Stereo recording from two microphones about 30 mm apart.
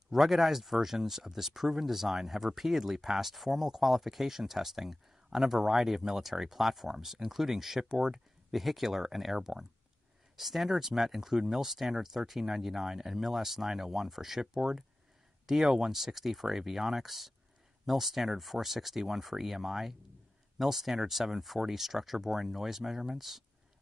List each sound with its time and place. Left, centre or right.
0.1 s speech: centre